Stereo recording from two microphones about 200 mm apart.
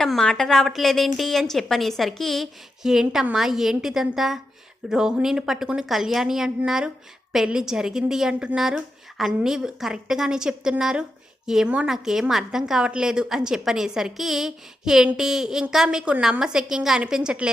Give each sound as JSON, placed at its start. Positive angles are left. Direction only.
{"t": 0.0, "sound": "a woman's voice", "side_deg": 5}